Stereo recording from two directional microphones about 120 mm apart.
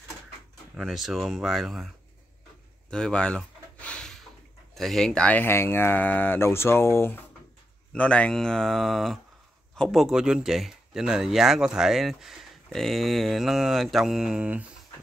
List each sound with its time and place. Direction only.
0.7 s speech: centre (ahead or behind)
2.9 s a sound: 10° left (ahead or behind)
4.7 s speech: 5° left (ahead or behind); by 7.2 s 20° left (ahead or behind)
7.9 s speech: 10° left (ahead or behind); by 14.7 s 10° right (ahead or behind)